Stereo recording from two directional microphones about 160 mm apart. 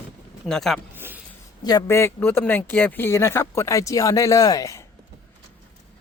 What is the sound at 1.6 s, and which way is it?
Speech, 20° left (ahead or behind).